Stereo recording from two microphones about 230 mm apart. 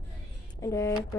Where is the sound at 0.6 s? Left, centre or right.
Centre.